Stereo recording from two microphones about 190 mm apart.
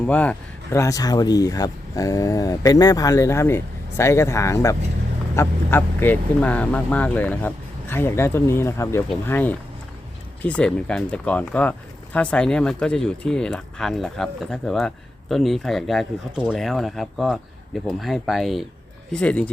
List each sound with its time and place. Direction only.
0.0 s speech: 5° left (ahead or behind)